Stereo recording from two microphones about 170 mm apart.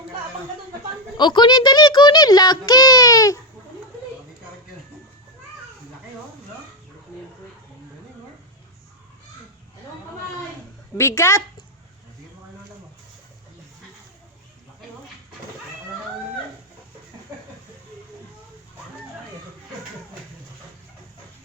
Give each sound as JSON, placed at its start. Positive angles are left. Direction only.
{"t": 1.1, "sound": "a child's voice", "side_deg": 25}
{"t": 10.9, "sound": "a woman's voice", "side_deg": 15}